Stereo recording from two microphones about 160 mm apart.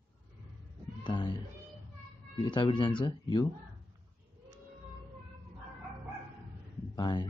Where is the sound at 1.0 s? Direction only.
30° left (ahead or behind).